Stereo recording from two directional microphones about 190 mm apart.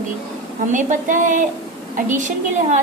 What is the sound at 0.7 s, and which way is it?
A woman's voice, 45° right (ahead or behind).